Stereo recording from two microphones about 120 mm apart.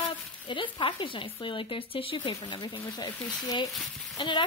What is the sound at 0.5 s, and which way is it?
Speech, 45° left (ahead or behind).